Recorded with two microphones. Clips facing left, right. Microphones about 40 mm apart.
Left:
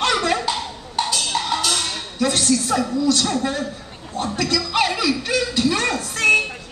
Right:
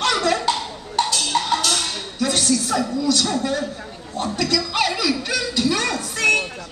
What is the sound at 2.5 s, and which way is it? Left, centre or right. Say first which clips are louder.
A woman's voice: left 1 dB; centre.